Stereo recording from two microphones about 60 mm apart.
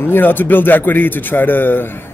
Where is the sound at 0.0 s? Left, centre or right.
Left.